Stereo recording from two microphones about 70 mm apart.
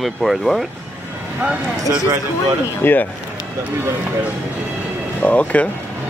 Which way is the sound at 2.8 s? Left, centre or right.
Left.